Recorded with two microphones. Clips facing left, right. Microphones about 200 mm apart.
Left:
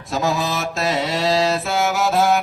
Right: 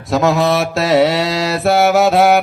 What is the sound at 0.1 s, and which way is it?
Mantra, 70° right (ahead or behind).